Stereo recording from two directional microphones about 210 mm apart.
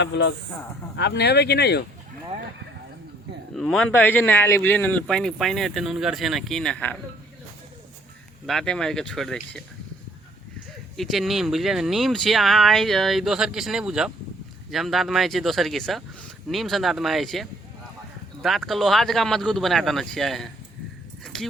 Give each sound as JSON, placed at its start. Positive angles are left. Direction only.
{"t": 0.0, "sound": "a man's voice", "side_deg": 55}
{"t": 3.5, "sound": "a man's voice", "side_deg": 5}
{"t": 8.4, "sound": "a man's voice", "side_deg": 0}
{"t": 10.9, "sound": "a man's voice", "side_deg": 0}